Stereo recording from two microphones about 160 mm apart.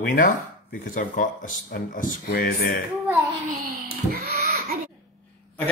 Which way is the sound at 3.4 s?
65° right (ahead or behind).